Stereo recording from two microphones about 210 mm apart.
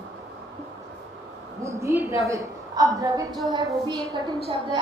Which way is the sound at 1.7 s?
15° right (ahead or behind).